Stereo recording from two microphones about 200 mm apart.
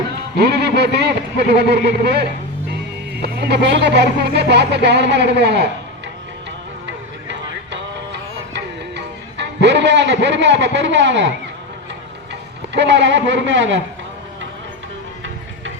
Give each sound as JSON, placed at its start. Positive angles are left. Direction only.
{"t": 0.3, "sound": "speech", "side_deg": -55}
{"t": 7.3, "sound": "music", "side_deg": -60}
{"t": 12.3, "sound": "a man's voice", "side_deg": -60}